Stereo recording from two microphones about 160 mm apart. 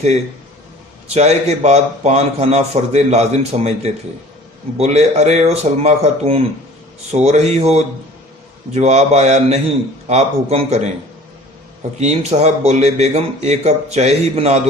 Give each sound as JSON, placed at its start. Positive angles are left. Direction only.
{"t": 1.1, "sound": "a man's voice", "side_deg": -40}
{"t": 11.9, "sound": "a man's voice", "side_deg": -40}